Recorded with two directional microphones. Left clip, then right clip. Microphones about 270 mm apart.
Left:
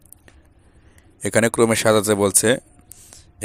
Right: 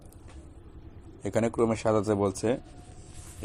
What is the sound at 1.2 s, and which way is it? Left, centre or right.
Speech, left.